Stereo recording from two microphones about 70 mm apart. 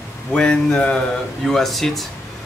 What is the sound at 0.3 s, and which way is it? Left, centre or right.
Speech, centre.